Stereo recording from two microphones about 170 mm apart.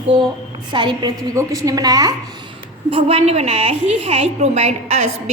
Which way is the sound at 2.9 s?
35° right (ahead or behind).